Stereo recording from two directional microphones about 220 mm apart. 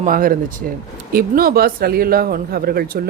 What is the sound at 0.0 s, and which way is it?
Speech, 40° right (ahead or behind).